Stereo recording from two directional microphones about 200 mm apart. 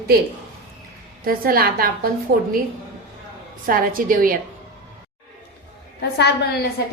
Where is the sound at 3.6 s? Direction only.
45° right (ahead or behind).